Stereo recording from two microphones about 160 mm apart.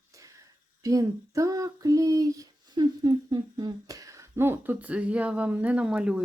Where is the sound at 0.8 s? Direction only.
20° right (ahead or behind).